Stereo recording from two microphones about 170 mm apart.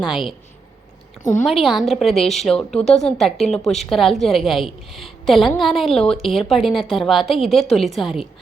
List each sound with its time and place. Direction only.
0.0 s a woman's voice: centre (ahead or behind)
1.2 s a woman's voice: 45° left (ahead or behind)
1.5 s a woman's voice: centre (ahead or behind)